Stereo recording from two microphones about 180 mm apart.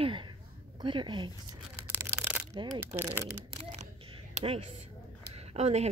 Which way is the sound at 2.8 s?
10° right (ahead or behind).